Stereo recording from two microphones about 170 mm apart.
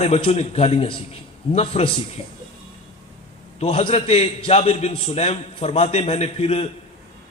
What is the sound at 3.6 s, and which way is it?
A man's voice, 35° left (ahead or behind).